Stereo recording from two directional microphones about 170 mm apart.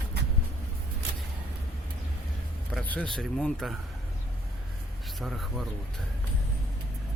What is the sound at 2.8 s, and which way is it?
Speech, 10° left (ahead or behind).